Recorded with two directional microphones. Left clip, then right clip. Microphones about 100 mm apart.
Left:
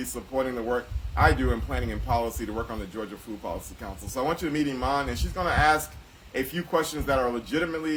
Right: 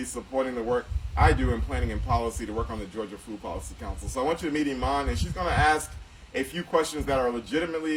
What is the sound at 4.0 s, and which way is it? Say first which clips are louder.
Speech: even; 35° left (ahead or behind).